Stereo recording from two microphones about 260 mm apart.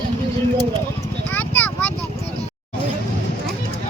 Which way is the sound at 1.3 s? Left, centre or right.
Centre.